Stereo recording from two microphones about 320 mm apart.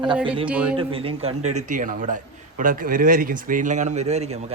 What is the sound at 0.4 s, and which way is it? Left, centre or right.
Speech, centre.